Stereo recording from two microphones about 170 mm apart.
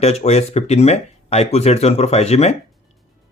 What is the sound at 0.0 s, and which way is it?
Speech, 40° left (ahead or behind).